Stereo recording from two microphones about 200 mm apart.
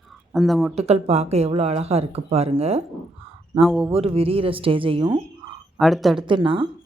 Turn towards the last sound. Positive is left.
turn(degrees=-25)  # may be behind; listen again after turning